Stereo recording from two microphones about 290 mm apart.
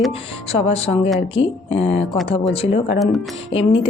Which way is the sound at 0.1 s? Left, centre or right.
Centre.